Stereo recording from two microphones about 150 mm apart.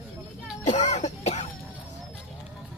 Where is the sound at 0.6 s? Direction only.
55° left (ahead or behind).